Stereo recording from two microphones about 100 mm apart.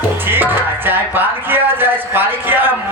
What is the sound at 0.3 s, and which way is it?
Speech, 20° right (ahead or behind).